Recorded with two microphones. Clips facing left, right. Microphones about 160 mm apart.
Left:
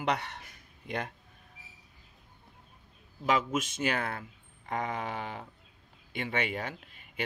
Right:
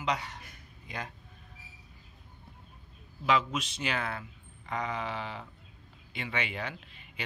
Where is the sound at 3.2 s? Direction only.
45° left (ahead or behind).